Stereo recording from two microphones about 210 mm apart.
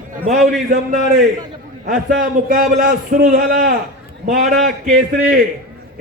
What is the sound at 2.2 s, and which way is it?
A man's voice, 40° right (ahead or behind).